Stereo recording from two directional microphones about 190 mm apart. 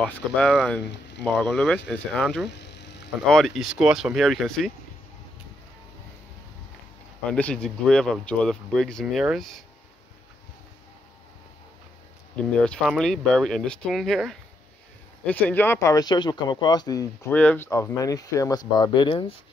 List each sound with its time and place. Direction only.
0.1 s speech: 5° left (ahead or behind)
2.4 s insect: 65° left (ahead or behind)
3.3 s speech: centre (ahead or behind)
7.2 s speech: 5° left (ahead or behind)
12.4 s speech: 5° left (ahead or behind); by 19.3 s 30° left (ahead or behind)